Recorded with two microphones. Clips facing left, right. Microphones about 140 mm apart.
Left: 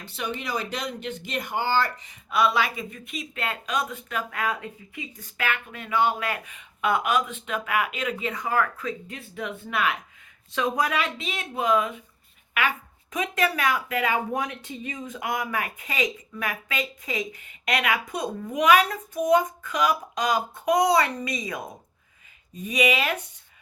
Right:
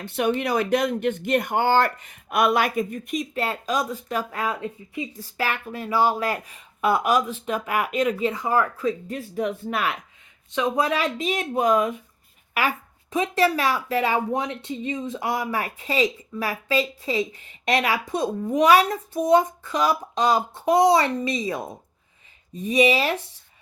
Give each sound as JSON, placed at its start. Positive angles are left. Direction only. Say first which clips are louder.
{"t": 0.0, "sound": "speech", "louder": "right 9 dB", "side_deg": -55}
{"t": 8.3, "sound": "speech", "louder": "right 3 dB", "side_deg": -30}
{"t": 10.5, "sound": "speech", "louder": "right 3 dB", "side_deg": -25}
{"t": 22.6, "sound": "speech", "louder": "right 5 dB", "side_deg": -30}